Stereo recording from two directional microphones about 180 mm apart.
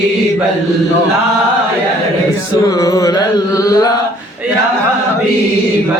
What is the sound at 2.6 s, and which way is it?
Music, 20° left (ahead or behind).